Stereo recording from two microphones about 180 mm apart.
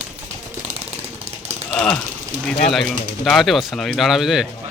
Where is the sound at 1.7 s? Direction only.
5° left (ahead or behind).